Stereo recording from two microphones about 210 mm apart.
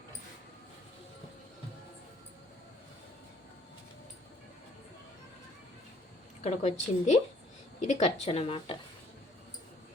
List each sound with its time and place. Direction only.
6.4 s a woman's voice: 35° left (ahead or behind)